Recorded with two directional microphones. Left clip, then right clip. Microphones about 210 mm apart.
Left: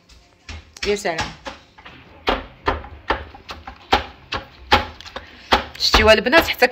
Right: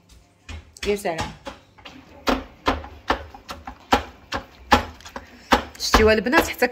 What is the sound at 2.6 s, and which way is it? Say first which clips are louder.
Music: even; 30° right (ahead or behind).